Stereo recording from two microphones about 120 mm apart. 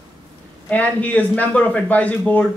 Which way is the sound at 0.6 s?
10° left (ahead or behind).